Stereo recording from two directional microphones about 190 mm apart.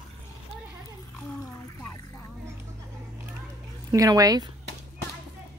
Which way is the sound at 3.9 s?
20° right (ahead or behind).